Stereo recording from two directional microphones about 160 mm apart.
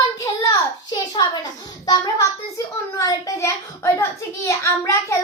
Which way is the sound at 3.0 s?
20° left (ahead or behind).